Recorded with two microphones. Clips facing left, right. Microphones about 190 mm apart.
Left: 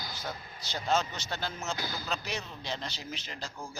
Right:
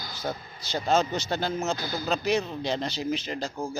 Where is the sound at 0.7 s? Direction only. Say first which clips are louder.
Right 6 dB; 40° right (ahead or behind).